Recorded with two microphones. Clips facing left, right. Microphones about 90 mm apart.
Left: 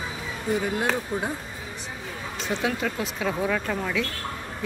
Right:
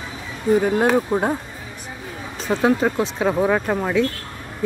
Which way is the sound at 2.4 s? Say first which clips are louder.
Right 9 dB; 35° right (ahead or behind).